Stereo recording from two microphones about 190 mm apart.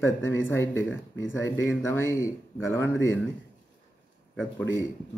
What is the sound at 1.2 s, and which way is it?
Speech, 75° left (ahead or behind).